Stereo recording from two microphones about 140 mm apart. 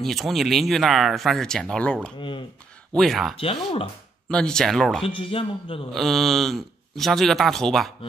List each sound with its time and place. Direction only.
0.0 s speech: centre (ahead or behind)
2.1 s speech: 35° left (ahead or behind)
3.0 s speech: centre (ahead or behind)
3.3 s speech: 45° left (ahead or behind)
4.3 s speech: 5° left (ahead or behind)
5.0 s speech: 40° left (ahead or behind)
5.9 s speech: centre (ahead or behind)